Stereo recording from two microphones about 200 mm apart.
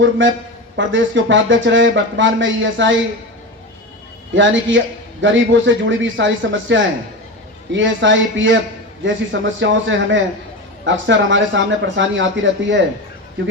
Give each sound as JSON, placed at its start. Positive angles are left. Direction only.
{"t": 0.0, "sound": "speech", "side_deg": -65}
{"t": 4.4, "sound": "speech", "side_deg": -65}